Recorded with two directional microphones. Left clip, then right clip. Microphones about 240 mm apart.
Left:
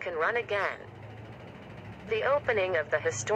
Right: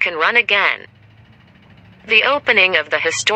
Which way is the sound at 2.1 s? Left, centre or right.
Right.